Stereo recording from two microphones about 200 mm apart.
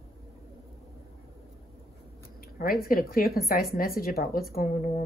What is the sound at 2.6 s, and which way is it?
A woman's voice, 45° left (ahead or behind).